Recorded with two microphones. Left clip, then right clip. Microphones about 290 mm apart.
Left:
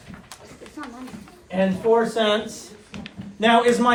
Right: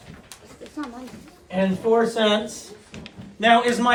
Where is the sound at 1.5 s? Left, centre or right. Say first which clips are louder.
Left 1 dB; centre.